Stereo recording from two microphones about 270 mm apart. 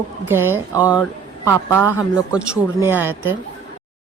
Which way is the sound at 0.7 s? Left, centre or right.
Centre.